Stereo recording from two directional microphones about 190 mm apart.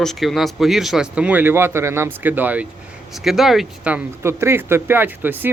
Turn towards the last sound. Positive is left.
turn(degrees=-10)  # may be behind; listen again after turning